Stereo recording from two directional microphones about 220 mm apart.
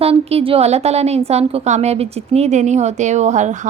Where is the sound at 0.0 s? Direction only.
25° right (ahead or behind).